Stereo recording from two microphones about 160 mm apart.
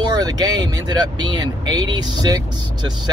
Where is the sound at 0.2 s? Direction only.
25° right (ahead or behind).